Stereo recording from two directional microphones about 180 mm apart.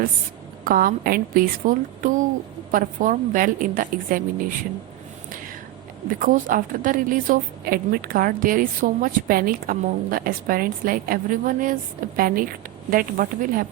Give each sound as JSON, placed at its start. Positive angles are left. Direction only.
{"t": 0.6, "sound": "a woman's voice", "side_deg": -50}
{"t": 6.1, "sound": "a woman's voice", "side_deg": -50}